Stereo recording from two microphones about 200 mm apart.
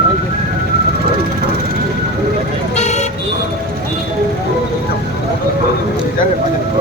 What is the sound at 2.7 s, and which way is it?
Vehicle, 35° left (ahead or behind).